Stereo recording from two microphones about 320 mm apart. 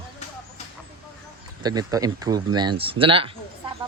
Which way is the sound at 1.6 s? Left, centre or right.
Centre.